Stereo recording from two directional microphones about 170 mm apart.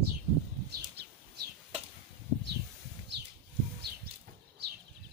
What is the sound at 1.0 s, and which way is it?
Bird, 75° right (ahead or behind).